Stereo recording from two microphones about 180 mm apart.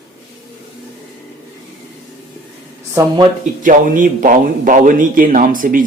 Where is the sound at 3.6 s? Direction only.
45° right (ahead or behind).